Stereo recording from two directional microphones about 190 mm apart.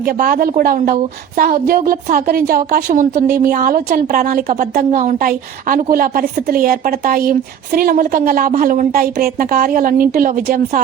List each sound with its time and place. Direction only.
0.0 s a woman's voice: 50° right (ahead or behind)